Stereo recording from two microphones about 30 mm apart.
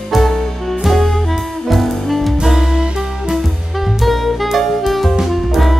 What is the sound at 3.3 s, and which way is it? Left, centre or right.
Music, centre.